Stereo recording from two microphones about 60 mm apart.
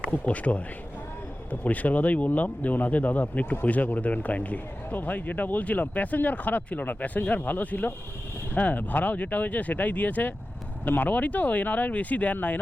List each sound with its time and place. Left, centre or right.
0.1 s speech: left